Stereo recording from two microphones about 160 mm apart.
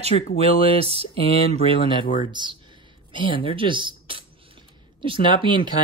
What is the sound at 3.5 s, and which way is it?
Speech, 30° right (ahead or behind).